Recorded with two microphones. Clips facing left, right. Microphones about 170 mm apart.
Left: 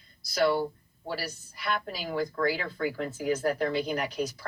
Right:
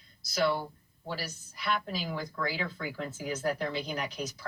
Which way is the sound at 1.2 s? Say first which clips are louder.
Left 3 dB; 50° left (ahead or behind).